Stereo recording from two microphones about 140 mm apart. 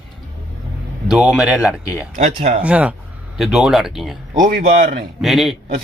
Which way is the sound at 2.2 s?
55° right (ahead or behind).